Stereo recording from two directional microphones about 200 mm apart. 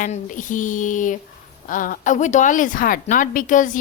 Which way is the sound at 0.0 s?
40° left (ahead or behind).